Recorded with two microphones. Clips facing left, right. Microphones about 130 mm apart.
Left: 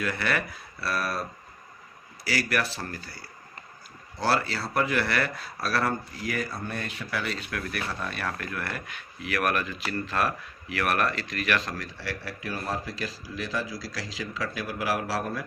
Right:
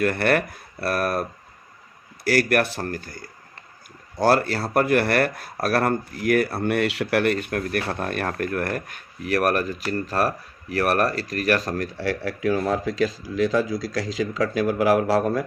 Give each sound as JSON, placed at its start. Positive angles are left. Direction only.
{"t": 0.0, "sound": "speech", "side_deg": -55}
{"t": 2.2, "sound": "speech", "side_deg": -55}
{"t": 12.5, "sound": "speech", "side_deg": -90}